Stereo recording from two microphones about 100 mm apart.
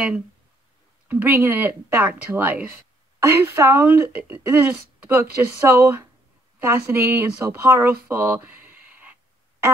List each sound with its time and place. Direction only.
1.0 s speech: 20° right (ahead or behind)